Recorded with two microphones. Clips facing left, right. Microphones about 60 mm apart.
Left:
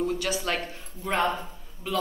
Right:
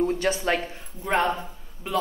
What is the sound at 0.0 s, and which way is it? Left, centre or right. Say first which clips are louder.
Speech: right 4 dB; right.